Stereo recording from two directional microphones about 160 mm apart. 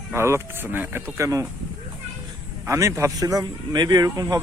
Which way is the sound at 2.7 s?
20° right (ahead or behind).